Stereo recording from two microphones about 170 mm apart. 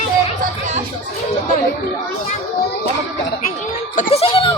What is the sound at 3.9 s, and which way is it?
Speech, 35° left (ahead or behind).